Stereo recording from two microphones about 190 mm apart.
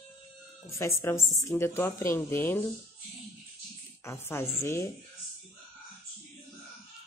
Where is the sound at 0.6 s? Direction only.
15° left (ahead or behind).